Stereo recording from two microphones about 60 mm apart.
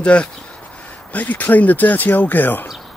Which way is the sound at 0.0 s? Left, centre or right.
Centre.